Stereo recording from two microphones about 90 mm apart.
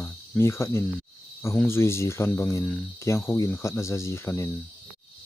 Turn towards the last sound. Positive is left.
turn(degrees=30)  # may be behind; listen again after turning